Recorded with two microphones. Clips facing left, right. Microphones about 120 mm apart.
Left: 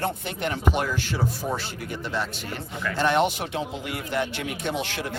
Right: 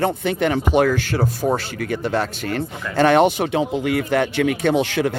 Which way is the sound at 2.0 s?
50° right (ahead or behind).